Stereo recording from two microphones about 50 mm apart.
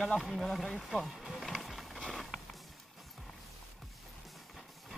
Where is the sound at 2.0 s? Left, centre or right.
Centre.